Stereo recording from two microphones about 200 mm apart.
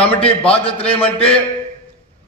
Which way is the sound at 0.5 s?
30° left (ahead or behind).